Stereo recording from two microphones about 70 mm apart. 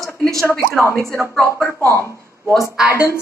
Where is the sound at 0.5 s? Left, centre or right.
Left.